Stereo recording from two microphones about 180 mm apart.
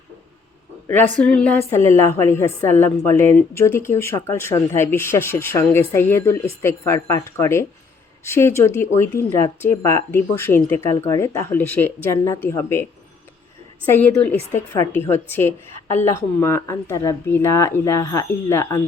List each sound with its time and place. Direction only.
0.9 s a woman's voice: 10° left (ahead or behind)
13.8 s a woman's voice: 10° left (ahead or behind)